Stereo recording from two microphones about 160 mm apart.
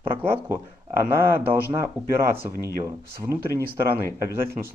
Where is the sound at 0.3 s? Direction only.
15° right (ahead or behind).